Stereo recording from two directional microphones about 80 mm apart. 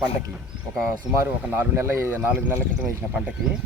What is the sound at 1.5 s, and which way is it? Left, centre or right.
Speech, right.